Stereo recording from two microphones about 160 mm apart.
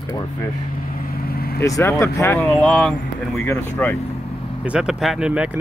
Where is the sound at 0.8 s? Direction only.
65° left (ahead or behind).